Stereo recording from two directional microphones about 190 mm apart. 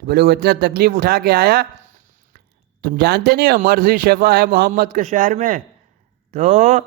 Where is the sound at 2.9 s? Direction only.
55° right (ahead or behind); by 6.9 s 40° right (ahead or behind).